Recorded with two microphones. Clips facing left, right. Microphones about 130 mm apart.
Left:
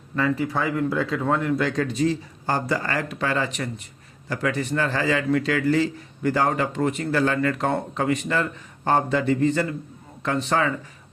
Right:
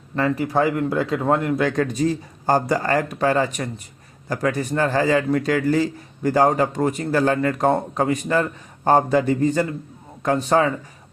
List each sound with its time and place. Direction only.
0.2 s a man's voice: 35° right (ahead or behind)
1.5 s a man's voice: 50° right (ahead or behind)